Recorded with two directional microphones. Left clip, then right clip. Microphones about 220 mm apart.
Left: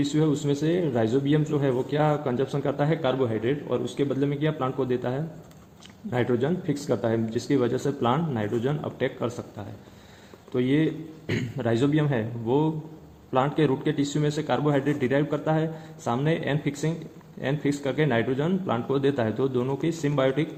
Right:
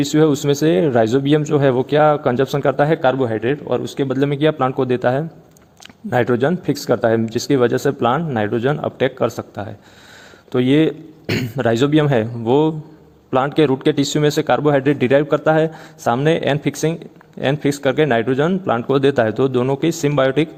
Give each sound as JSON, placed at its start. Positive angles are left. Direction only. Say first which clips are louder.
{"t": 0.0, "sound": "speech", "louder": "right 10 dB", "side_deg": -50}